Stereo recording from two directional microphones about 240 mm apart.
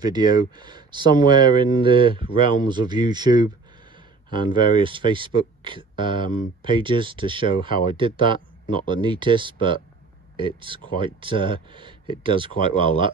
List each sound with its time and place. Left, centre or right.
0.0 s speech: centre